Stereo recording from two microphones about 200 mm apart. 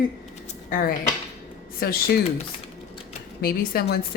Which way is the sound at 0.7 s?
45° left (ahead or behind).